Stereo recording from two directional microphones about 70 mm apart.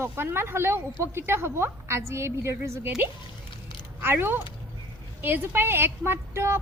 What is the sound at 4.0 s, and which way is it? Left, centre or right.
A woman's voice, right.